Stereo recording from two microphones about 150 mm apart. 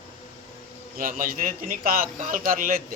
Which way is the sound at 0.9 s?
65° right (ahead or behind).